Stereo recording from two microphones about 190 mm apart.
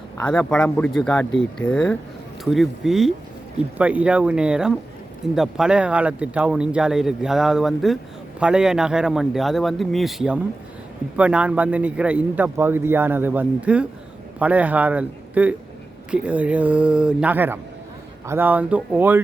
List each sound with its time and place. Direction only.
0.2 s a man's voice: 10° left (ahead or behind); by 19.2 s 10° right (ahead or behind)